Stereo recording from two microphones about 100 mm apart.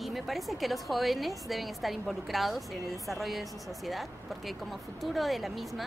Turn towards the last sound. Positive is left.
turn(degrees=0)  # may be behind; listen again after turning